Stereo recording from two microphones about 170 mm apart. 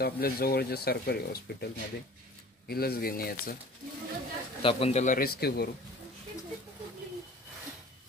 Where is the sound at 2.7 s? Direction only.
65° left (ahead or behind).